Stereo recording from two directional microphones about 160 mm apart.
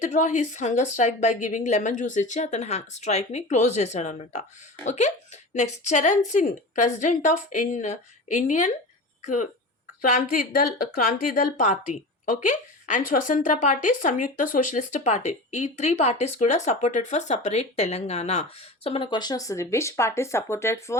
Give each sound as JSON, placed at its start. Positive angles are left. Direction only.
{"t": 0.0, "sound": "speech", "side_deg": 50}